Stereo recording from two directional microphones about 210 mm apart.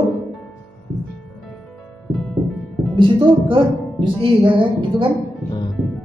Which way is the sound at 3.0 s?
25° right (ahead or behind).